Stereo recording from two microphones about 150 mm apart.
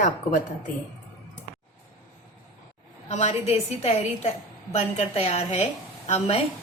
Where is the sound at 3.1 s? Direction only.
45° left (ahead or behind).